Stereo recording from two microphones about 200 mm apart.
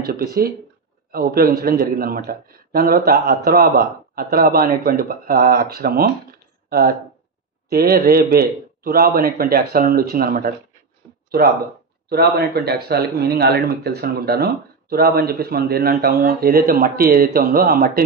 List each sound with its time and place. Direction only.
0.0 s speech: 50° right (ahead or behind)
12.1 s speech: 55° right (ahead or behind)